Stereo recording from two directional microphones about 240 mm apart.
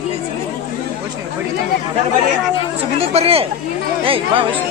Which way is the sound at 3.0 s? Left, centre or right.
Right.